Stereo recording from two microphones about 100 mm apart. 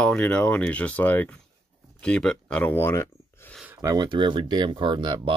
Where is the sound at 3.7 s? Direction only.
30° right (ahead or behind).